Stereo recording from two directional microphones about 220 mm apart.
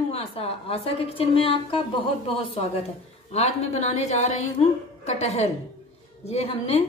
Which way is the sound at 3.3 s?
30° left (ahead or behind).